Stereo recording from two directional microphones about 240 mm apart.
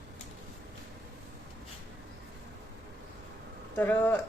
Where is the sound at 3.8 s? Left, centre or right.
Centre.